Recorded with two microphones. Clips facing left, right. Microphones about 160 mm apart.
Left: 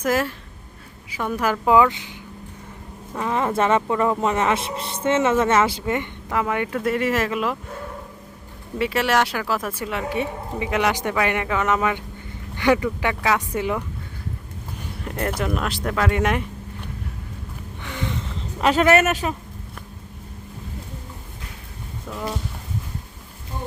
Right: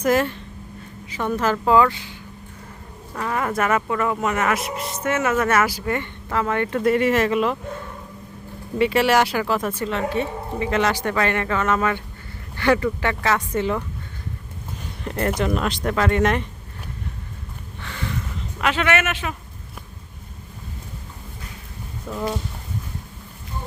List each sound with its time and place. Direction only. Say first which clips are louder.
0.0 s speech: right 3 dB; 5° left (ahead or behind); by 2.1 s 20° left (ahead or behind)
3.2 s speech: left 2 dB; 20° left (ahead or behind); by 7.5 s centre (ahead or behind)
8.8 s speech: right 3 dB; centre (ahead or behind)
15.0 s speech: right 3 dB; 5° left (ahead or behind)
17.8 s a sound: left 2 dB; 15° left (ahead or behind)
18.6 s a man's voice: left 5 dB; 40° left (ahead or behind)
22.1 s speech: right 3 dB; centre (ahead or behind)